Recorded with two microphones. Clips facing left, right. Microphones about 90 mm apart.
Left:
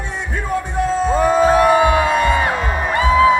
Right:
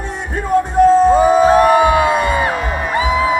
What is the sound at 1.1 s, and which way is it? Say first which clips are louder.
Music: right 4 dB; 10° right (ahead or behind).